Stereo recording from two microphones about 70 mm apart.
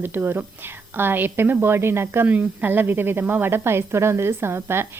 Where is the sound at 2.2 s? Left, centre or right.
Right.